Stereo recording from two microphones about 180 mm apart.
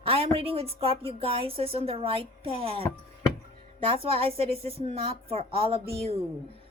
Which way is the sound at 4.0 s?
30° right (ahead or behind).